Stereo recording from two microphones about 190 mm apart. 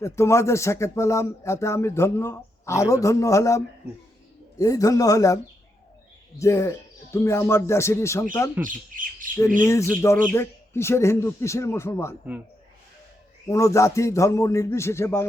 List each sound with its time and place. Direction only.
0.0 s speech: 15° left (ahead or behind)
6.4 s speech: 15° left (ahead or behind)
8.6 s speech: 45° right (ahead or behind)
9.6 s speech: 15° left (ahead or behind)
13.5 s speech: 15° left (ahead or behind)